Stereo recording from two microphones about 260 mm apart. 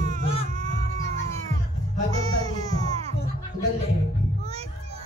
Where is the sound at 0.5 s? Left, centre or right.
Right.